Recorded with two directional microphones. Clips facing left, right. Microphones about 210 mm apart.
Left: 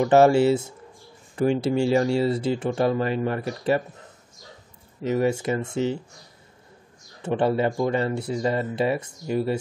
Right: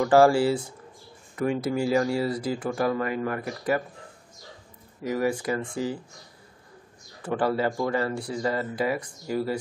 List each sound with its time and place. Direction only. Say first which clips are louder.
0.0 s speech: left 2 dB; 20° left (ahead or behind)
5.0 s speech: left 3 dB; 25° left (ahead or behind)
7.2 s speech: left 3 dB; 25° left (ahead or behind)